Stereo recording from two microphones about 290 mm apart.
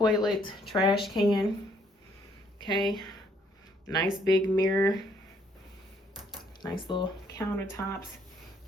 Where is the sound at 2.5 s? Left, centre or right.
Centre.